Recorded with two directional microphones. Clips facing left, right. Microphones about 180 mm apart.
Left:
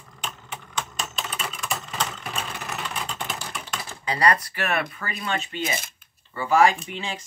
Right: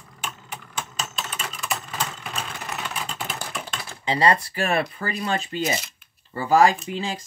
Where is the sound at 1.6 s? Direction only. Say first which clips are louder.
Right 1 dB; centre (ahead or behind).